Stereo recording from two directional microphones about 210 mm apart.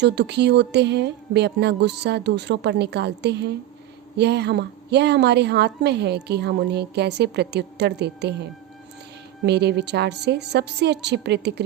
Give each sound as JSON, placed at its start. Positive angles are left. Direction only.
{"t": 0.0, "sound": "a woman's voice", "side_deg": -55}
{"t": 9.5, "sound": "a woman's voice", "side_deg": -55}